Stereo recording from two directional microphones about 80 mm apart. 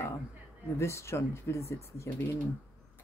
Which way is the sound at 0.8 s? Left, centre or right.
Left.